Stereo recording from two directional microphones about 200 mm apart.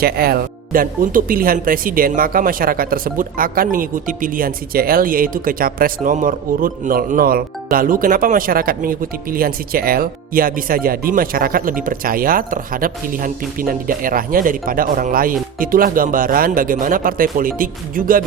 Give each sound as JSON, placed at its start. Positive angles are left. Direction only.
{"t": 0.0, "sound": "speech", "side_deg": -50}